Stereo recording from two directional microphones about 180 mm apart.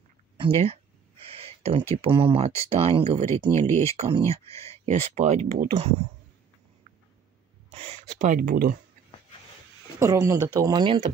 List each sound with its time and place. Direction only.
1.3 s speech: 30° right (ahead or behind)
3.3 s speech: 10° left (ahead or behind)
3.8 s speech: 35° right (ahead or behind)
7.7 s speech: 35° right (ahead or behind); by 8.7 s 50° right (ahead or behind)
9.9 s speech: 15° right (ahead or behind)